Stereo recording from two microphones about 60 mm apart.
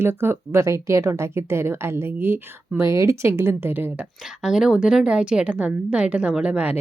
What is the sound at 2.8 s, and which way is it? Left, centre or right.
A woman's voice, right.